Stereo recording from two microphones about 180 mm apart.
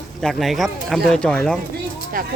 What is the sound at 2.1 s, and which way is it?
Speech, 50° right (ahead or behind).